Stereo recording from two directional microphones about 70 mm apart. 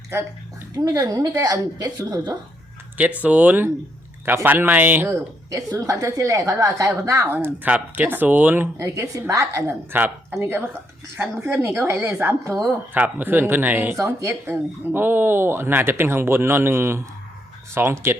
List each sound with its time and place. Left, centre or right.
0.1 s speech: right
0.7 s a woman's voice: right
3.0 s speech: right
5.0 s a woman's voice: right
7.3 s speech: right
8.8 s a woman's voice: right
9.9 s speech: right
11.4 s speech: right
14.2 s speech: right